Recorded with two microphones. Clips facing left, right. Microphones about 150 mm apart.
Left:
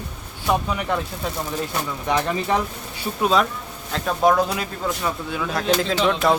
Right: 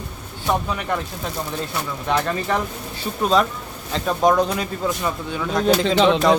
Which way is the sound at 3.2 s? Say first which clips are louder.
Right 1 dB; centre (ahead or behind).